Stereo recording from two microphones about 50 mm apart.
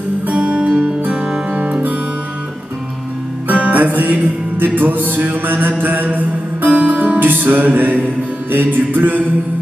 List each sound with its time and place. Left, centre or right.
0.3 s music: right
3.4 s music: right
3.7 s music: right